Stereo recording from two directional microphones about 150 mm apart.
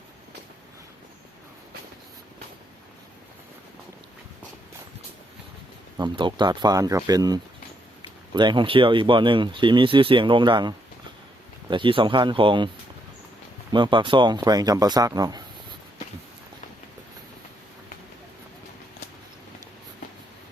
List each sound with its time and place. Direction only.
6.0 s speech: 30° right (ahead or behind)